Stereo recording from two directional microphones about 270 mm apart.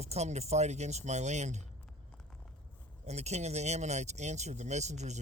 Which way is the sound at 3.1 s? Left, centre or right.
Right.